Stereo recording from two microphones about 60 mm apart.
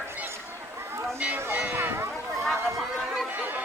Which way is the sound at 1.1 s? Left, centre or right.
Right.